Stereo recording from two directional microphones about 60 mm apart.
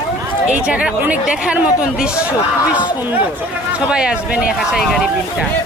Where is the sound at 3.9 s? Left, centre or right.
Centre.